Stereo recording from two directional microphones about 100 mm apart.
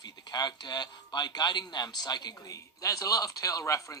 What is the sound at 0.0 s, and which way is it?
Speech, 45° left (ahead or behind).